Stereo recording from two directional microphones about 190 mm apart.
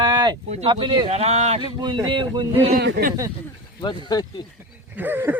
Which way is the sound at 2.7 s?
50° right (ahead or behind).